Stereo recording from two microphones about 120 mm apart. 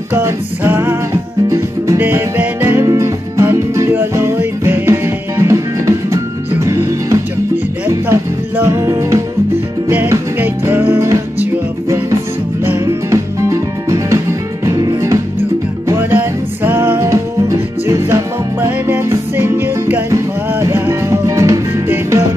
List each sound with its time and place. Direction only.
0.1 s music: 15° right (ahead or behind)